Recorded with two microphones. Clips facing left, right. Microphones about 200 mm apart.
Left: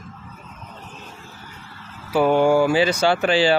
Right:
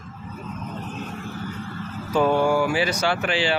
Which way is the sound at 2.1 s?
15° left (ahead or behind).